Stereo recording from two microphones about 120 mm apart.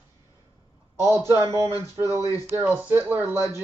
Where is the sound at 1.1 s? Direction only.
20° right (ahead or behind).